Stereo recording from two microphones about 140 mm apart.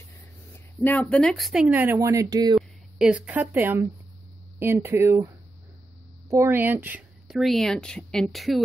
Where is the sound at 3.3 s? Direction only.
15° right (ahead or behind).